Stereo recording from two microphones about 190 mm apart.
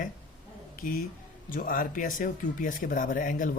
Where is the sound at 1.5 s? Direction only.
45° left (ahead or behind).